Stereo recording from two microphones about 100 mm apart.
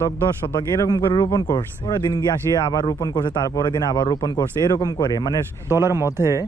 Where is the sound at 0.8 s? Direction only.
40° left (ahead or behind).